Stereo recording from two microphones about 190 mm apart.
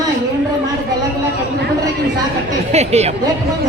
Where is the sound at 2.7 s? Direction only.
35° right (ahead or behind).